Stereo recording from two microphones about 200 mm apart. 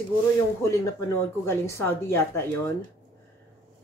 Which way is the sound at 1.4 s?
15° left (ahead or behind).